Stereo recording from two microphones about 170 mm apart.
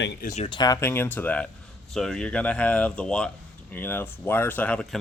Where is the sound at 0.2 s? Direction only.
40° left (ahead or behind).